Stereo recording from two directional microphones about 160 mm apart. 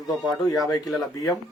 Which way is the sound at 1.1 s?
20° left (ahead or behind).